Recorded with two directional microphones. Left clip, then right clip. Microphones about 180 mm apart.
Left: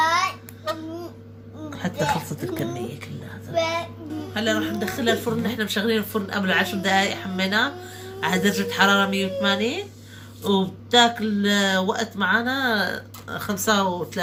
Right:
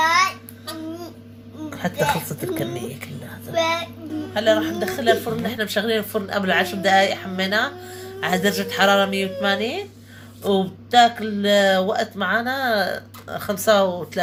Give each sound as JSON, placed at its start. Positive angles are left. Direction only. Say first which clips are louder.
{"t": 1.7, "sound": "a child's voice", "louder": "right 3 dB", "side_deg": -35}